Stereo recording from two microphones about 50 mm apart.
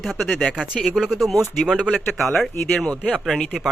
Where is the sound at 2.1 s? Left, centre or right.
Centre.